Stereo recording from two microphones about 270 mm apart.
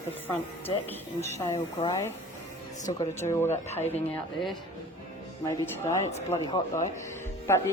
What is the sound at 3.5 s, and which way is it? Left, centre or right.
Speech, left.